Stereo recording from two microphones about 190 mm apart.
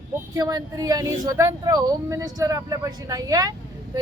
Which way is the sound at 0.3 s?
20° right (ahead or behind).